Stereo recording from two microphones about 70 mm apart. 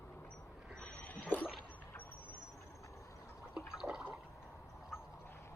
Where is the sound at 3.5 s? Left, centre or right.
Centre.